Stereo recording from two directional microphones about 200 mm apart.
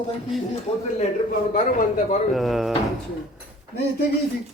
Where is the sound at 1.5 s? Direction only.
40° left (ahead or behind).